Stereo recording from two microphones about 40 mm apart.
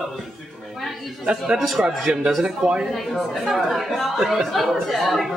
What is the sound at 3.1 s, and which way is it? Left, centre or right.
A woman's voice, centre.